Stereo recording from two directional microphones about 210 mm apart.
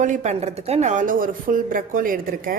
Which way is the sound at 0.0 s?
35° right (ahead or behind).